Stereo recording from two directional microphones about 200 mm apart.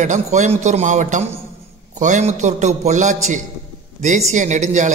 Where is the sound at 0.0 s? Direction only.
35° right (ahead or behind).